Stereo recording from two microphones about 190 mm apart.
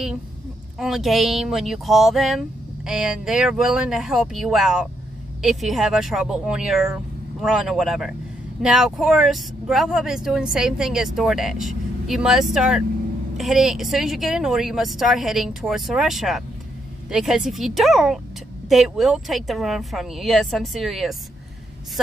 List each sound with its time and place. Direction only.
0.7 s speech: centre (ahead or behind)